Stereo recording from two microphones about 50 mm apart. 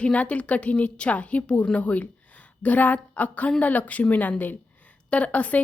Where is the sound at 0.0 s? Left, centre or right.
Left.